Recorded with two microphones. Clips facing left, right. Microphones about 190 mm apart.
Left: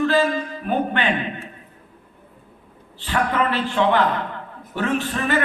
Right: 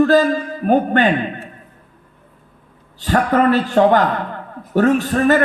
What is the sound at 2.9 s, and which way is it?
A man's voice, 40° right (ahead or behind).